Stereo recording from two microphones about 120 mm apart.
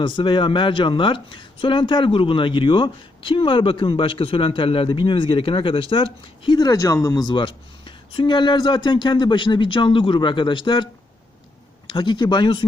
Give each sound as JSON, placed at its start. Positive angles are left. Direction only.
{"t": 0.0, "sound": "speech", "side_deg": 40}
{"t": 11.9, "sound": "speech", "side_deg": 40}